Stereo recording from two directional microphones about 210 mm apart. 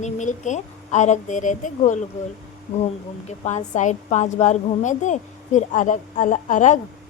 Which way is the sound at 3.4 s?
35° left (ahead or behind).